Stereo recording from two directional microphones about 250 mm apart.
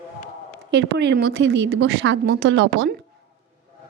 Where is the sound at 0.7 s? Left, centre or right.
Right.